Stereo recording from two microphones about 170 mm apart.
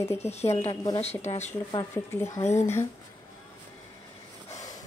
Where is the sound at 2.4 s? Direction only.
40° left (ahead or behind).